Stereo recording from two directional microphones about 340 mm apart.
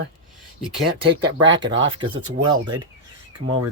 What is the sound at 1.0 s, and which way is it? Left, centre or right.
Speech, right.